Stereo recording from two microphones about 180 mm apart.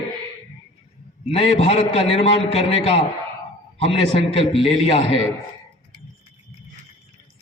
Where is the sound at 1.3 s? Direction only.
35° left (ahead or behind).